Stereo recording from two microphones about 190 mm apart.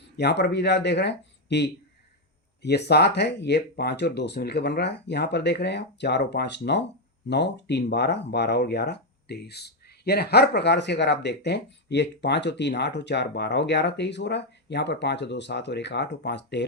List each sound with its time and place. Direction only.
0.2 s speech: 60° left (ahead or behind)